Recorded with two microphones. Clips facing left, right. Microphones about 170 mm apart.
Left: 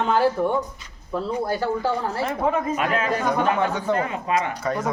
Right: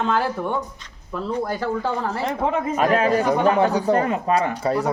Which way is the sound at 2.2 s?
25° right (ahead or behind).